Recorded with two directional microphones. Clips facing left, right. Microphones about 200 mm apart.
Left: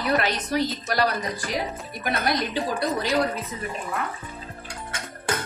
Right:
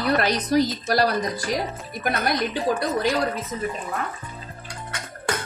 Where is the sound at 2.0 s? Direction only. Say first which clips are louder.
Right 2 dB; 50° right (ahead or behind).